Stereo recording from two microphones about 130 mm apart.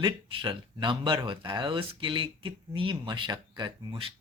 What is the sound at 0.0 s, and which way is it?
Speech, 40° right (ahead or behind).